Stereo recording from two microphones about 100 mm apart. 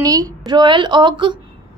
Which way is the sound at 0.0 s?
40° right (ahead or behind).